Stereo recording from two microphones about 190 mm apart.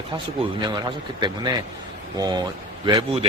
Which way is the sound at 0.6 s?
25° right (ahead or behind).